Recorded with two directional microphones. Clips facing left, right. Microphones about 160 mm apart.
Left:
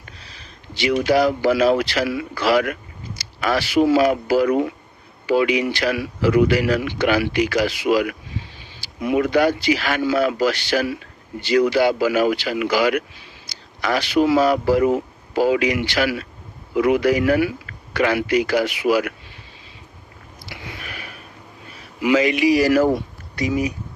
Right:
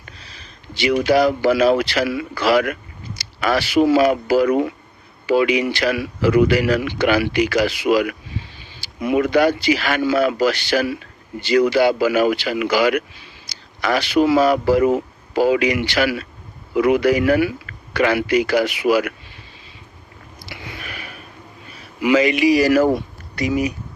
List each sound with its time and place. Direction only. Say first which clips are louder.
0.8 s speech: right 2 dB; 70° right (ahead or behind)
13.5 s a sound: even; 75° right (ahead or behind)
13.8 s speech: right 1 dB; 70° right (ahead or behind)
22.0 s speech: right 1 dB; 70° right (ahead or behind)